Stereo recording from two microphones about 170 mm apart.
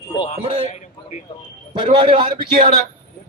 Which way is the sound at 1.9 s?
30° right (ahead or behind).